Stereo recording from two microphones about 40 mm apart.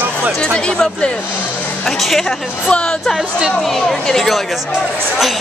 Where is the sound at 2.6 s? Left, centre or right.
Left.